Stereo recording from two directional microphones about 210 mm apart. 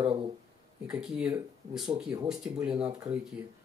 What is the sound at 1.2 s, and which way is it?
Speech, 5° right (ahead or behind).